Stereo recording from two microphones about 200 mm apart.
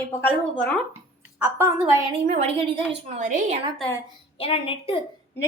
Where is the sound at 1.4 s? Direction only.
15° right (ahead or behind).